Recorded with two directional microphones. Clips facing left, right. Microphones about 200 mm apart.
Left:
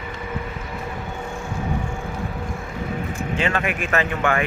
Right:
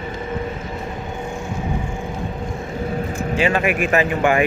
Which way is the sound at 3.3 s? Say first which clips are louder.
Right 5 dB; 10° right (ahead or behind).